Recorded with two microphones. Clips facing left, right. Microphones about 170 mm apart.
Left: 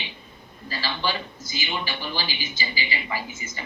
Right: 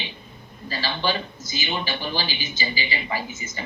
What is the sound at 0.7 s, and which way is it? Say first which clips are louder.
Speech: right 3 dB; 20° right (ahead or behind).